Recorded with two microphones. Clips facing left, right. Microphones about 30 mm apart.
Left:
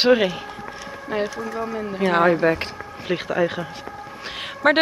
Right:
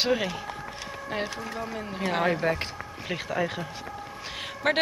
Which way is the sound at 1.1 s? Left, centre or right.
Centre.